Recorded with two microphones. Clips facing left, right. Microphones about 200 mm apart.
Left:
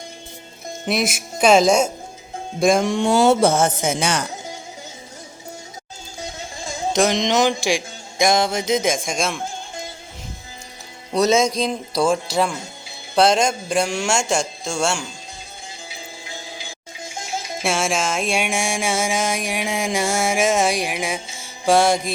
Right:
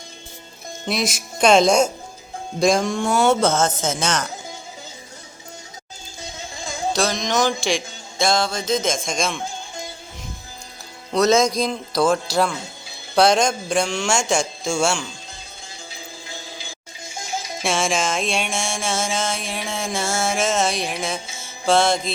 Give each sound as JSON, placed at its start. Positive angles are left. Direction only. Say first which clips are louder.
{"t": 0.9, "sound": "speech", "louder": "left 2 dB", "side_deg": 5}
{"t": 2.8, "sound": "music", "louder": "left 3 dB", "side_deg": 15}
{"t": 6.9, "sound": "music", "louder": "left 4 dB", "side_deg": 20}
{"t": 11.3, "sound": "music", "louder": "right 1 dB", "side_deg": 10}
{"t": 13.1, "sound": "speech", "louder": "even", "side_deg": 0}
{"t": 17.6, "sound": "music", "louder": "even", "side_deg": 5}